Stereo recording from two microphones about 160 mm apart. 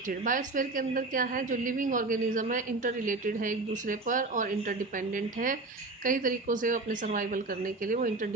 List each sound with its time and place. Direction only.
0.1 s a woman's voice: 55° right (ahead or behind)